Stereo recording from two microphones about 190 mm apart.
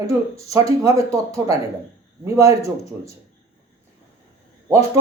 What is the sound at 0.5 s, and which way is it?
Speech, 15° right (ahead or behind).